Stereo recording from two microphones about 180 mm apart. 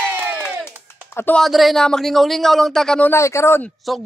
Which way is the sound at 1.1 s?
10° left (ahead or behind).